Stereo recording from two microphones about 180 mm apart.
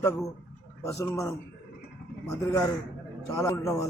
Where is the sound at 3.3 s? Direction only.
15° left (ahead or behind).